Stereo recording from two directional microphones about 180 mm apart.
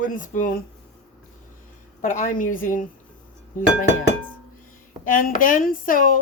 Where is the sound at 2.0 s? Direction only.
45° left (ahead or behind).